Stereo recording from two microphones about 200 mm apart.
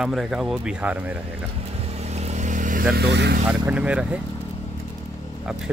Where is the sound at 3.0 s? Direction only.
55° right (ahead or behind).